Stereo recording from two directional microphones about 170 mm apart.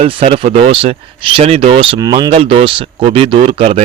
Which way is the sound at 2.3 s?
35° right (ahead or behind).